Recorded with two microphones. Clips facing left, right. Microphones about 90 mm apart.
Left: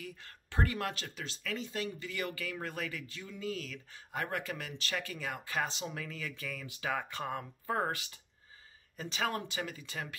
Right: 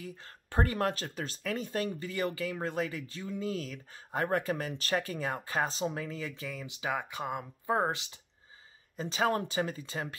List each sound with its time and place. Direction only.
0.5 s speech: 35° right (ahead or behind)